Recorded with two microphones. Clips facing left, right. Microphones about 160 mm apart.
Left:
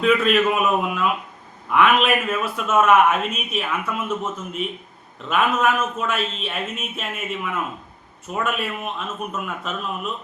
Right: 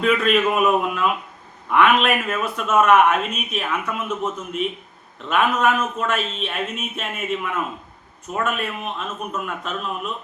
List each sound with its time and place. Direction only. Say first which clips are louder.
0.0 s speech: left 1 dB; centre (ahead or behind)
5.3 s speech: right 1 dB; centre (ahead or behind)